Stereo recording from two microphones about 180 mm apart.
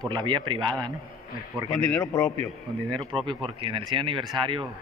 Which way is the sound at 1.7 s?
5° left (ahead or behind).